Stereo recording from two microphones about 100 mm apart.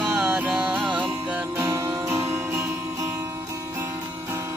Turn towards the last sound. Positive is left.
turn(degrees=-30)  # may be behind; listen again after turning